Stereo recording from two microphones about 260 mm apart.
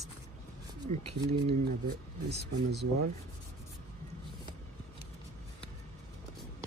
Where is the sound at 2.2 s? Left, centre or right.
Right.